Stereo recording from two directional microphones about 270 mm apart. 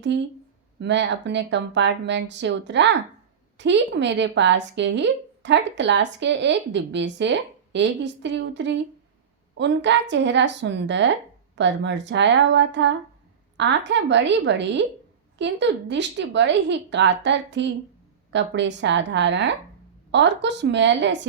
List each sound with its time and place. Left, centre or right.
0.1 s speech: right